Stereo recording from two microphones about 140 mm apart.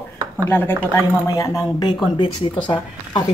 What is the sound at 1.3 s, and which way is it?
Speech, 25° left (ahead or behind).